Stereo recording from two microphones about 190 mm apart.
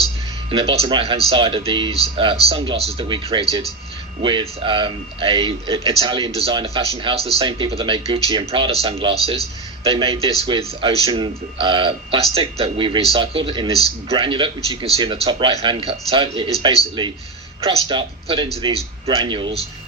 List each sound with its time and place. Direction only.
0.5 s speech: 30° right (ahead or behind)